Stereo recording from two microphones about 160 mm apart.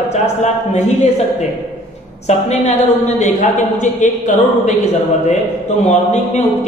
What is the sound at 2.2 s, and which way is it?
A man's voice, 45° left (ahead or behind).